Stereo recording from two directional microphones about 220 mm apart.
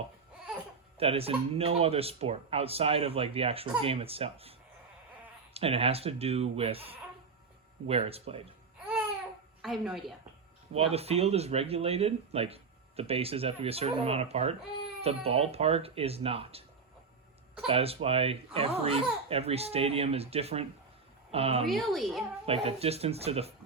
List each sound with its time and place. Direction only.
0.9 s speech: 25° right (ahead or behind)
5.5 s speech: 25° right (ahead or behind)
9.6 s a woman's voice: centre (ahead or behind)
10.8 s speech: 25° right (ahead or behind)
17.7 s speech: 25° right (ahead or behind)
21.7 s a child's voice: centre (ahead or behind)
22.4 s speech: 25° right (ahead or behind)